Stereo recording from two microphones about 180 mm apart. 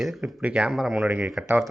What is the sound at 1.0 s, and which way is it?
Speech, 10° right (ahead or behind).